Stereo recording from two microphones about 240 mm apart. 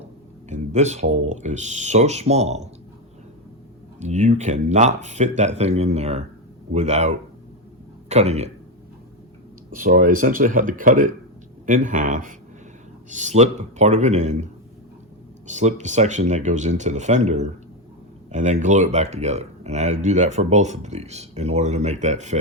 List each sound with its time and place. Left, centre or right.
0.5 s speech: right
4.0 s speech: right
8.1 s speech: right
9.7 s speech: right